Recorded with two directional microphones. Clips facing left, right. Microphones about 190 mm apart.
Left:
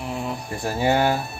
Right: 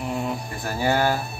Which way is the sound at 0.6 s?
20° left (ahead or behind).